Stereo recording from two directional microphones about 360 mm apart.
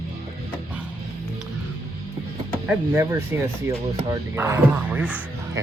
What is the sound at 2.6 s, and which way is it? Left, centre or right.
Speech, centre.